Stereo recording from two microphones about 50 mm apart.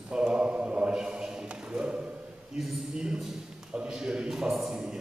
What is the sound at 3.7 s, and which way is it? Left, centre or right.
A man's voice, centre.